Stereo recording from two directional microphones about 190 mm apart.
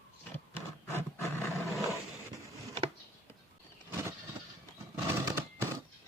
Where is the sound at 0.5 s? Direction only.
10° left (ahead or behind).